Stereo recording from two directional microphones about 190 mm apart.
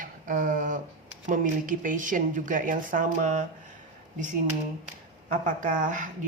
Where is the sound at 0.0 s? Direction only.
45° right (ahead or behind).